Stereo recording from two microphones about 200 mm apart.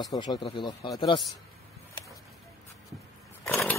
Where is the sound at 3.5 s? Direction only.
15° left (ahead or behind).